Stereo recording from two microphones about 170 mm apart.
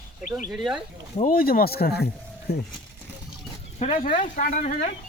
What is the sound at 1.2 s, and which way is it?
Speech, 60° left (ahead or behind).